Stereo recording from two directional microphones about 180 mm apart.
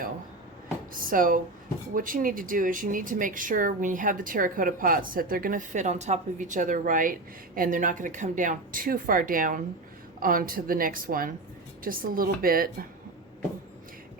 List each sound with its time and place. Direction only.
1.0 s speech: 50° right (ahead or behind)